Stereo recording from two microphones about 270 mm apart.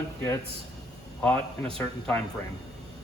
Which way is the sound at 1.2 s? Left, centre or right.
Centre.